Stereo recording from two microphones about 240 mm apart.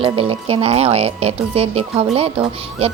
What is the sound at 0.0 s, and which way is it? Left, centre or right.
Speech, right.